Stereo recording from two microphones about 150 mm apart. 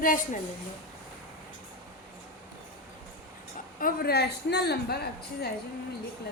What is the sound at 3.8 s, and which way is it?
A woman's voice, 80° left.